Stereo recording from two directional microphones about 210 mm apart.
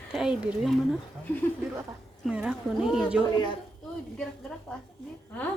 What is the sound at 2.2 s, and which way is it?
Speech, 5° right (ahead or behind).